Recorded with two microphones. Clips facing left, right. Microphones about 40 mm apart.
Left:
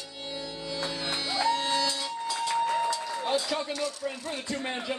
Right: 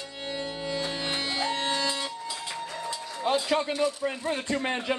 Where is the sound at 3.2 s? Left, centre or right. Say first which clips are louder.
Right 5 dB; right.